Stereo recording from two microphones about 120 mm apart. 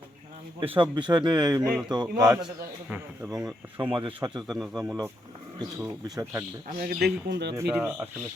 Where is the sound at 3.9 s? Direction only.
45° right (ahead or behind).